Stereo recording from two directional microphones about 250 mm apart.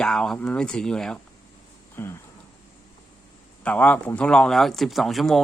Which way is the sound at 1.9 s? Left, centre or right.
Centre.